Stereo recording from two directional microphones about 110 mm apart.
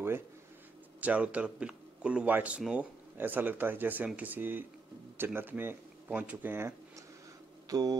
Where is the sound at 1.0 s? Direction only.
10° right (ahead or behind).